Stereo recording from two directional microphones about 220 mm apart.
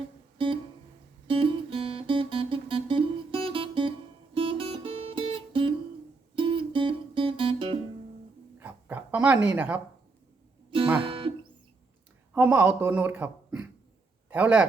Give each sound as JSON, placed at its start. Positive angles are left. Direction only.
{"t": 0.3, "sound": "music", "side_deg": -25}
{"t": 8.5, "sound": "a sound", "side_deg": -10}
{"t": 10.7, "sound": "music", "side_deg": -25}
{"t": 12.3, "sound": "a man's voice", "side_deg": -5}